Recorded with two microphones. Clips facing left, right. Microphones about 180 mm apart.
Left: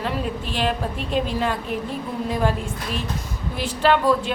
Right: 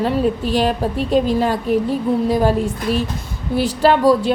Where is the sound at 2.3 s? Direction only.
35° right (ahead or behind).